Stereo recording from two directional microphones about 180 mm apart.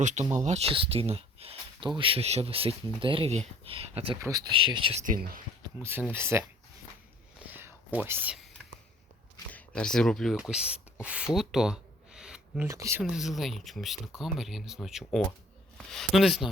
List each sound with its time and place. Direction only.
0.0 s speech: 40° right (ahead or behind)
4.2 s speech: 20° right (ahead or behind)
5.0 s speech: 50° right (ahead or behind)
5.8 s speech: 10° right (ahead or behind)
7.5 s whispering: 10° right (ahead or behind)
8.0 s speech: 10° right (ahead or behind)
9.5 s speech: 5° left (ahead or behind)
12.6 s speech: 15° right (ahead or behind)
13.0 s speech: centre (ahead or behind)